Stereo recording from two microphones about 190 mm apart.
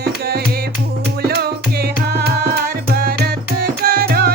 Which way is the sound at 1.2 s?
55° right (ahead or behind).